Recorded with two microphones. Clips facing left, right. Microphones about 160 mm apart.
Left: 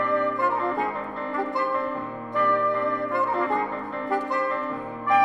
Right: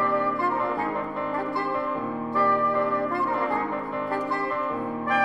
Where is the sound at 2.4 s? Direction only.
20° left (ahead or behind).